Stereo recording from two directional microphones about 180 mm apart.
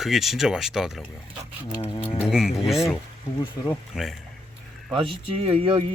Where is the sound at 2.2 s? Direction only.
5° right (ahead or behind).